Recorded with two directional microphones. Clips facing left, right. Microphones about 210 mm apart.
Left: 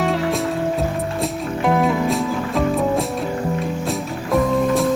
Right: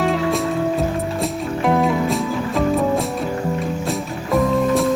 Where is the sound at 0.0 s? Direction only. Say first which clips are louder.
Right 1 dB; centre (ahead or behind).